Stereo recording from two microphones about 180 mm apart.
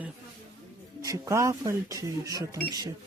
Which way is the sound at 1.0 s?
15° right (ahead or behind).